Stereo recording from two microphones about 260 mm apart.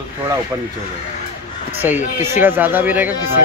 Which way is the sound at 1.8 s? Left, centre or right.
Centre.